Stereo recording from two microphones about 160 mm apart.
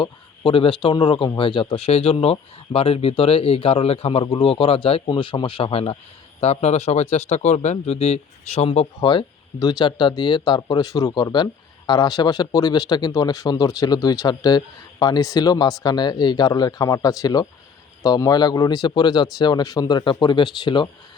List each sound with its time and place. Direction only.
0.0 s a man's voice: 30° left (ahead or behind)
9.0 s speech: 30° left (ahead or behind)